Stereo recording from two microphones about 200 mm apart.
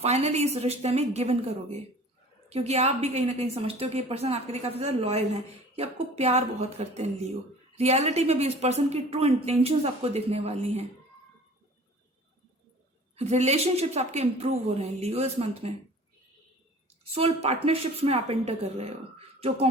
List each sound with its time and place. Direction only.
0.0 s a woman's voice: 35° right (ahead or behind)
2.5 s a woman's voice: 30° right (ahead or behind)
13.1 s a woman's voice: 35° right (ahead or behind)
17.0 s a woman's voice: 30° right (ahead or behind)